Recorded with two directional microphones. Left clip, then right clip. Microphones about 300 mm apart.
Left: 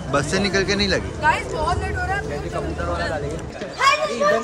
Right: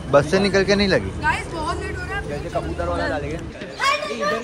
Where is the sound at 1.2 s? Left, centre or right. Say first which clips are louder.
Left 3 dB; left.